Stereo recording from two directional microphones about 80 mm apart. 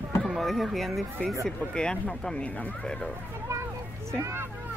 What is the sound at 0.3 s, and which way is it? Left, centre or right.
Speech, centre.